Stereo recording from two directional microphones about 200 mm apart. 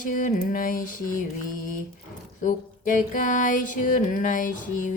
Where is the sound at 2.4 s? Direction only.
40° left (ahead or behind).